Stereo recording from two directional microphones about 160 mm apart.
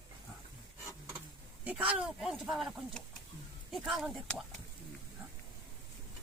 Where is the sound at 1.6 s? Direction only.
10° right (ahead or behind).